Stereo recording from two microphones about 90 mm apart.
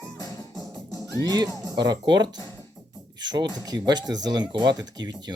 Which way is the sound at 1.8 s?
50° right (ahead or behind).